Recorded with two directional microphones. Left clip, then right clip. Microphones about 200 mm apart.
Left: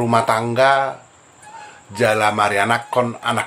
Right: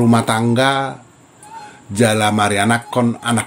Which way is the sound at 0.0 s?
35° right (ahead or behind).